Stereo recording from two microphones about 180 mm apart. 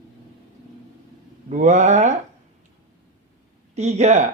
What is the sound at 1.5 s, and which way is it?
Speech, 45° right (ahead or behind).